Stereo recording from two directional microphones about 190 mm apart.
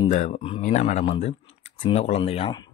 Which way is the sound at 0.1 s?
35° left (ahead or behind).